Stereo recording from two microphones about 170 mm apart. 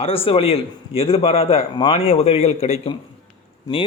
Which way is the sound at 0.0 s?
35° left (ahead or behind).